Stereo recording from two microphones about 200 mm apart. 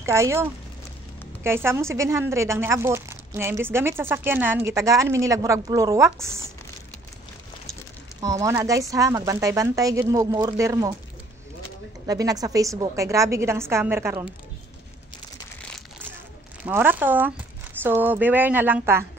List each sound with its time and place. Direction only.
0.0 s speech: 15° right (ahead or behind)
8.2 s speech: 15° right (ahead or behind)
12.1 s speech: 20° right (ahead or behind)
16.6 s speech: 10° right (ahead or behind)